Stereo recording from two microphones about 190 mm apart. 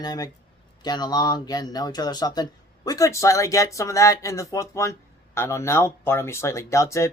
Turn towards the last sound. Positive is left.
turn(degrees=15)  # may be behind; listen again after turning